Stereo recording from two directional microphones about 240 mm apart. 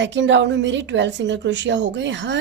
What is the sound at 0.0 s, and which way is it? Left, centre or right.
A woman's voice, right.